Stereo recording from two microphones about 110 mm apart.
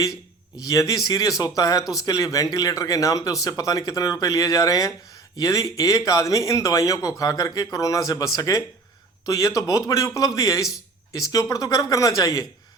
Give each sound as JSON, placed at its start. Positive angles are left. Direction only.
{"t": 0.6, "sound": "speech", "side_deg": 30}